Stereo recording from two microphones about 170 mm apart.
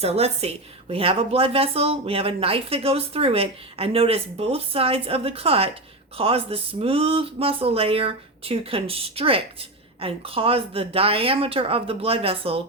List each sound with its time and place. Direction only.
0.0 s speech: 35° right (ahead or behind)